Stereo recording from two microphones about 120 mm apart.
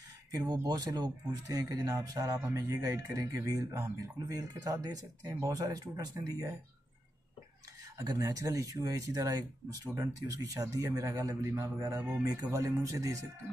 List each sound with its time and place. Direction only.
0.3 s speech: 35° right (ahead or behind)
8.0 s speech: 30° right (ahead or behind)